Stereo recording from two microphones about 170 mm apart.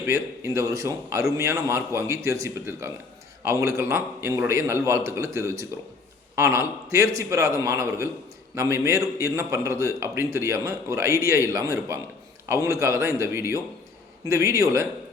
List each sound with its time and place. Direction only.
0.0 s a man's voice: 15° right (ahead or behind)